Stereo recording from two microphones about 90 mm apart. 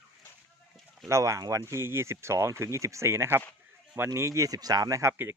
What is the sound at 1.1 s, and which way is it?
Speech, 35° right (ahead or behind).